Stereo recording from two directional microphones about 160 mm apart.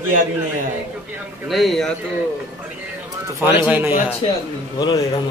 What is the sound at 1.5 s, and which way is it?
Speech, centre (ahead or behind).